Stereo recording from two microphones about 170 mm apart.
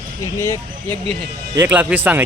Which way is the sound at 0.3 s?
15° left (ahead or behind).